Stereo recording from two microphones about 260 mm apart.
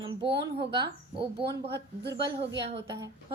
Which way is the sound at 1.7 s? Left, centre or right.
Right.